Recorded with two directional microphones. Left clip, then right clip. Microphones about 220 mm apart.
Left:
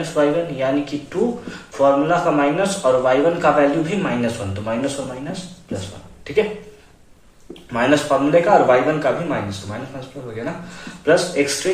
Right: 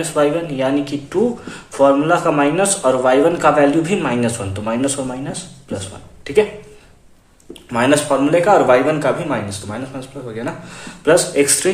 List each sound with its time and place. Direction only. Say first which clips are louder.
0.0 s speech: right 1 dB; 50° right (ahead or behind)
7.7 s speech: right 2 dB; 50° right (ahead or behind)